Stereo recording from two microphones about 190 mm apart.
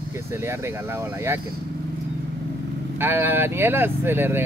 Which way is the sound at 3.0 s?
10° right (ahead or behind).